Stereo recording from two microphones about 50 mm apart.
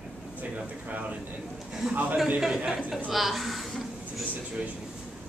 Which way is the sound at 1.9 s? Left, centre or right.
Right.